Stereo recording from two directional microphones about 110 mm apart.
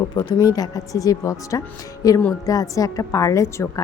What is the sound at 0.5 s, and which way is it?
A woman's voice, 35° left (ahead or behind).